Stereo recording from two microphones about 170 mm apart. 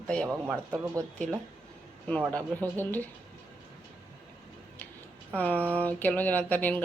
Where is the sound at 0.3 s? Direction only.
10° right (ahead or behind).